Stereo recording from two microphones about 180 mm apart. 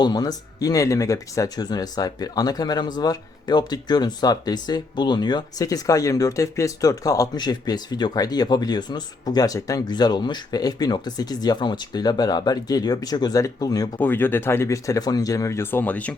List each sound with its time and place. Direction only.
0.0 s speech: 20° left (ahead or behind)
14.0 s speech: 10° left (ahead or behind)